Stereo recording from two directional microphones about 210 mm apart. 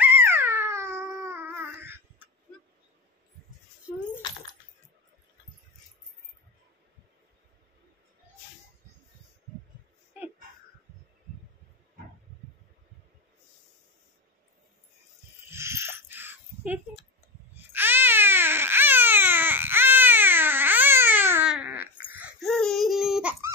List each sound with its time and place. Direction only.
0.0 s dog: 10° right (ahead or behind)
15.4 s a sound: 10° right (ahead or behind)
17.6 s baby cry: 10° right (ahead or behind)